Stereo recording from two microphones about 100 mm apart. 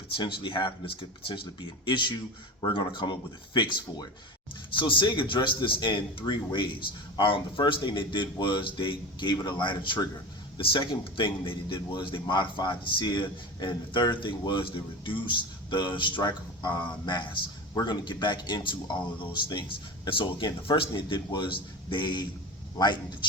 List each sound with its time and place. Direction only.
0.1 s a man's voice: 55° left (ahead or behind)
17.7 s a man's voice: 50° left (ahead or behind)